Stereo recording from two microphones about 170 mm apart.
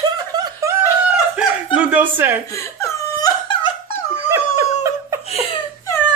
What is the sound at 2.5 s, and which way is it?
Laughter, 20° left (ahead or behind).